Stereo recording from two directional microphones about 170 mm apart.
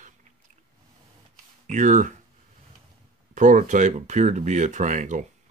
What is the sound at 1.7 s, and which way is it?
Speech, 45° right (ahead or behind).